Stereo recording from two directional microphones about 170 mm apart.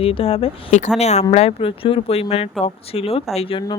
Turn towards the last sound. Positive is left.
turn(degrees=30)  # may be behind; listen again after turning